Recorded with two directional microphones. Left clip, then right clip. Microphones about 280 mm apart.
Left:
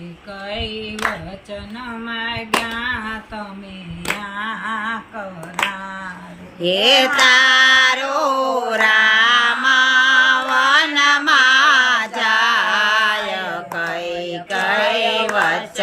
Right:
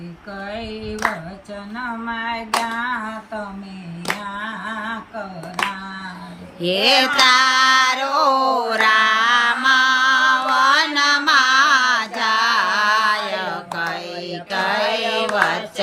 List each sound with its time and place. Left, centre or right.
0.5 s female singing: centre
2.0 s hands: centre
6.6 s mantra: centre